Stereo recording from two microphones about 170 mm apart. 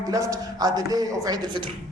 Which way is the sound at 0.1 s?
20° right (ahead or behind).